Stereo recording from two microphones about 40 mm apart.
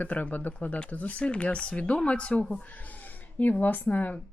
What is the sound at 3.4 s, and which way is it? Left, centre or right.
Speech, left.